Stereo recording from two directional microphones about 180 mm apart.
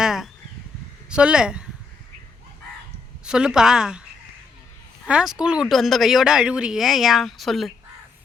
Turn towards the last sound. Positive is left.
turn(degrees=0)  # may be behind; listen again after turning